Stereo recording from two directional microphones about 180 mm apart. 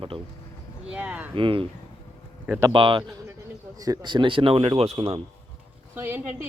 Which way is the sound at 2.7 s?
30° right (ahead or behind).